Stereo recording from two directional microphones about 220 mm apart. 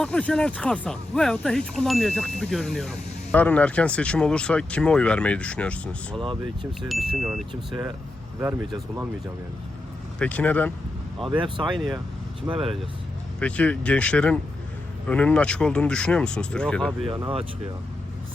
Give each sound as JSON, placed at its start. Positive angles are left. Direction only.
{"t": 0.0, "sound": "speech", "side_deg": 5}
{"t": 6.1, "sound": "speech", "side_deg": -20}
{"t": 6.8, "sound": "speech", "side_deg": 0}
{"t": 10.2, "sound": "speech", "side_deg": 5}
{"t": 11.3, "sound": "speech", "side_deg": -20}
{"t": 12.5, "sound": "speech", "side_deg": 0}
{"t": 17.1, "sound": "speech", "side_deg": -15}